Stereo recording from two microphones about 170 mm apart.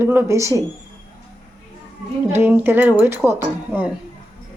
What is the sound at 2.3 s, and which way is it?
Speech, 10° right (ahead or behind).